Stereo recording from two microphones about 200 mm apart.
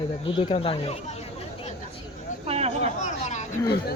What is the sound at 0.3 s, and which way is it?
Speech, 25° left (ahead or behind).